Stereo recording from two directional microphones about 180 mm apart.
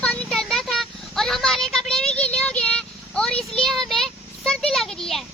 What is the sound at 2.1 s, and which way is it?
Child singing, 5° left (ahead or behind).